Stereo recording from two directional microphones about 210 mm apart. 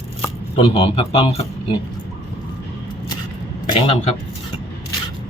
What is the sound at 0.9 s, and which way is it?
Speech, 30° left (ahead or behind).